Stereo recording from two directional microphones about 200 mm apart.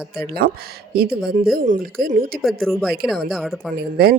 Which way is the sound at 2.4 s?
Centre (ahead or behind).